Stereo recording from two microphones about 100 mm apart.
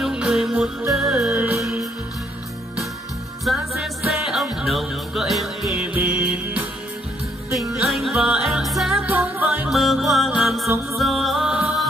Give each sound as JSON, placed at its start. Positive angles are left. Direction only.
{"t": 0.0, "sound": "music", "side_deg": -5}
{"t": 1.3, "sound": "music", "side_deg": -25}
{"t": 3.4, "sound": "music", "side_deg": 0}
{"t": 5.9, "sound": "music", "side_deg": -15}
{"t": 7.9, "sound": "music", "side_deg": 0}
{"t": 9.0, "sound": "music", "side_deg": -15}
{"t": 9.7, "sound": "music", "side_deg": 0}